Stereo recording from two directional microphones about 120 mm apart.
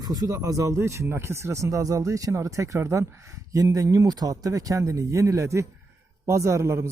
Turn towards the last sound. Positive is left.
turn(degrees=-25)  # may be behind; listen again after turning